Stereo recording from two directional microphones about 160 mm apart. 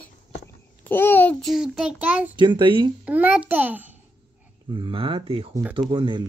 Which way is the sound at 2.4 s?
30° right (ahead or behind).